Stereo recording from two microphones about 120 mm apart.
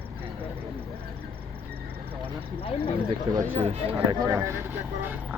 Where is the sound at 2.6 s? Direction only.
50° left (ahead or behind).